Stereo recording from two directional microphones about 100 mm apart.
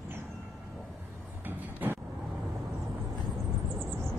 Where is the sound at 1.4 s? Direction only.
20° right (ahead or behind).